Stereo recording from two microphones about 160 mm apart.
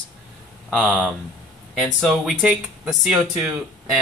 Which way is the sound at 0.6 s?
5° left (ahead or behind).